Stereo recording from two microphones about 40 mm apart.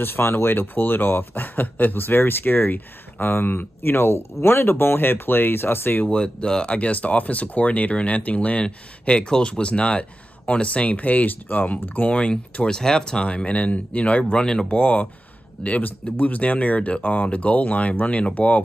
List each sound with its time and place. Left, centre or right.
0.0 s speech: left
6.0 s speech: left
8.6 s speech: left
11.0 s speech: left
12.1 s speech: left
13.3 s speech: left
14.3 s speech: left
15.8 s speech: left